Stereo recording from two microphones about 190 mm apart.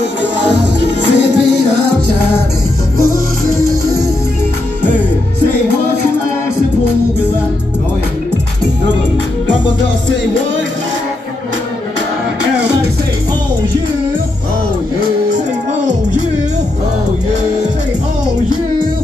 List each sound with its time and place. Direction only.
0.4 s music: 65° right (ahead or behind)
3.0 s music: 15° right (ahead or behind)